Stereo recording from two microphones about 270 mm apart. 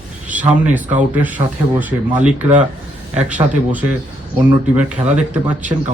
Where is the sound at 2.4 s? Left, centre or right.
Right.